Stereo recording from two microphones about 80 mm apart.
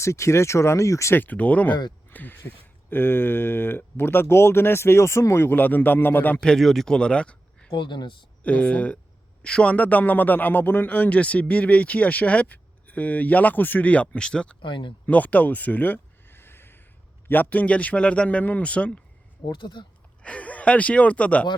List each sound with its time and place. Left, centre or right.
0.0 s speech: left
1.2 s a man's voice: left
6.4 s speech: centre
7.7 s speech: left
8.4 s a man's voice: centre
14.6 s speech: left
15.0 s a sound: centre
17.2 s a man's voice: left
19.5 s speech: left
20.2 s speech: centre